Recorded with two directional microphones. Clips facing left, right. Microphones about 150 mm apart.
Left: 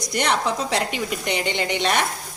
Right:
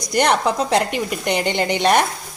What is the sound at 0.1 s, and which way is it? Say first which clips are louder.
A woman's voice: right 5 dB; 50° right (ahead or behind).